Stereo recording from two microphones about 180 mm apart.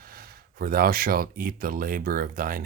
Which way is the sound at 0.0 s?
55° right (ahead or behind).